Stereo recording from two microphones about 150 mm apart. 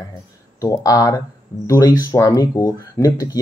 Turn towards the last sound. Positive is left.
turn(degrees=20)  # may be behind; listen again after turning